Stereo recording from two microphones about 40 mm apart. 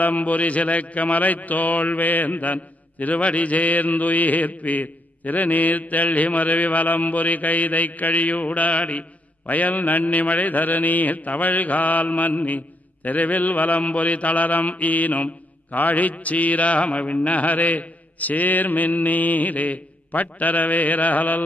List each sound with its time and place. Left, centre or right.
0.0 s a man's voice: left